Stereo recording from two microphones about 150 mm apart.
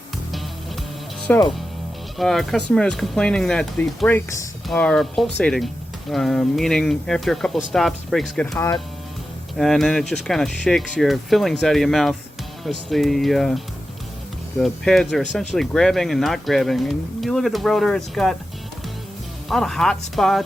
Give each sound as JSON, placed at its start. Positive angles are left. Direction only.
{"t": 1.3, "sound": "speech", "side_deg": 10}
{"t": 8.5, "sound": "speech", "side_deg": 20}
{"t": 9.6, "sound": "speech", "side_deg": 0}
{"t": 14.6, "sound": "speech", "side_deg": 0}
{"t": 19.5, "sound": "speech", "side_deg": 5}